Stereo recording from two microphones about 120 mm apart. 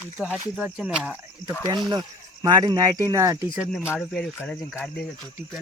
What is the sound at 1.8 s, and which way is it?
Speech, 35° right (ahead or behind).